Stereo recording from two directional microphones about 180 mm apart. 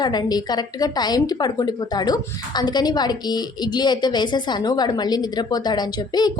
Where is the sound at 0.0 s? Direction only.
25° left (ahead or behind).